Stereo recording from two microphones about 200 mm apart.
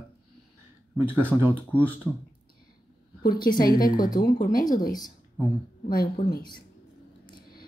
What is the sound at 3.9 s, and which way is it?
Speech, 20° left (ahead or behind).